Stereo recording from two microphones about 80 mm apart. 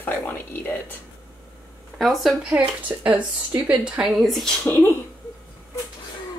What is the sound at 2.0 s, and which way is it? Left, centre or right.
Speech, centre.